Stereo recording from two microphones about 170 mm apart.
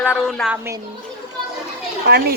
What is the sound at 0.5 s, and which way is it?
Speech, 15° right (ahead or behind).